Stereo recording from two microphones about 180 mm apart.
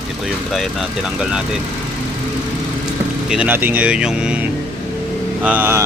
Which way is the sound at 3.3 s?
10° right (ahead or behind).